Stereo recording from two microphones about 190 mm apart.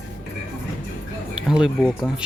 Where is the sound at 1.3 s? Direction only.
5° right (ahead or behind).